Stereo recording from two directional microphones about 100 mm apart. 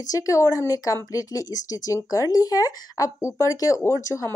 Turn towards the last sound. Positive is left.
turn(degrees=30)  # may be behind; listen again after turning